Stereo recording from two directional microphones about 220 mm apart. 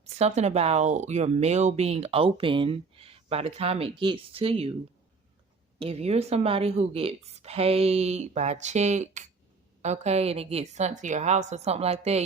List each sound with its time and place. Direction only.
0.0 s speech: 30° right (ahead or behind)
5.8 s speech: 30° right (ahead or behind)